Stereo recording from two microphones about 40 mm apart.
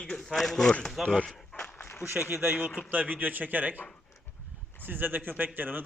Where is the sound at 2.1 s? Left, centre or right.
Right.